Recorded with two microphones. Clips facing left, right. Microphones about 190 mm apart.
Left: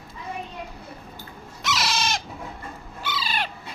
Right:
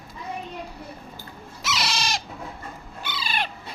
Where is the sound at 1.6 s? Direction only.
Centre (ahead or behind).